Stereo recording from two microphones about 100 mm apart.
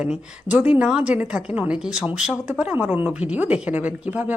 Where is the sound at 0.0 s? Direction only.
15° right (ahead or behind).